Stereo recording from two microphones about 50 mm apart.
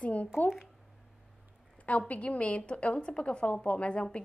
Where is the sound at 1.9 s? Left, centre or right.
Left.